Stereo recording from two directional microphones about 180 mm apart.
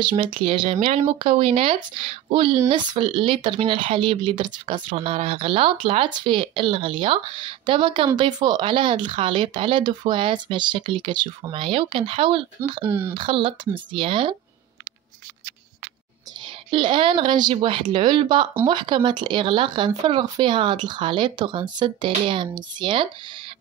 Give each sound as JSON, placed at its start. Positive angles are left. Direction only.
{"t": 0.0, "sound": "speech", "side_deg": -30}
{"t": 12.8, "sound": "speech", "side_deg": -10}
{"t": 13.1, "sound": "speech", "side_deg": -30}
{"t": 16.7, "sound": "speech", "side_deg": -25}